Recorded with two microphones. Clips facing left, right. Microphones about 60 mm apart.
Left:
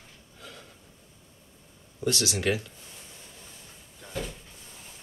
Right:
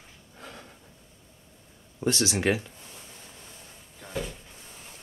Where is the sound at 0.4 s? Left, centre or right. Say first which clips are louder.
Right 2 dB; right.